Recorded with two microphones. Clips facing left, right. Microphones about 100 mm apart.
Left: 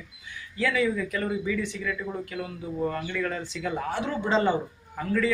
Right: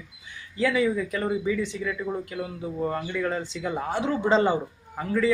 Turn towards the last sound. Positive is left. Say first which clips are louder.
# right 1 dB
turn(degrees=-20)  # may be behind; listen again after turning